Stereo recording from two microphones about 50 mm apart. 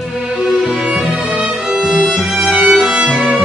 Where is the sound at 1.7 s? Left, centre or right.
Centre.